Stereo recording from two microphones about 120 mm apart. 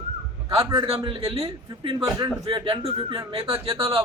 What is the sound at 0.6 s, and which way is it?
Speech, 35° right (ahead or behind).